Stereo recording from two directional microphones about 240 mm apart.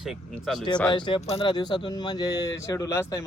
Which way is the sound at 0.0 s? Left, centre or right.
Centre.